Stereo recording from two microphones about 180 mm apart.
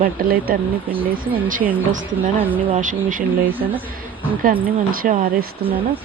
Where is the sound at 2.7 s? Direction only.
45° right (ahead or behind).